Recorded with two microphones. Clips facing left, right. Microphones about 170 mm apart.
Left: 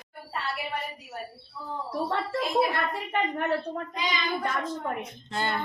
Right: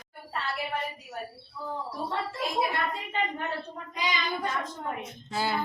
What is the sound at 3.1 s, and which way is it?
Speech, 60° left (ahead or behind).